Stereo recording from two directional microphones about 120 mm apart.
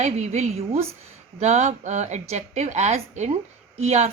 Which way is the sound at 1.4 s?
75° right (ahead or behind).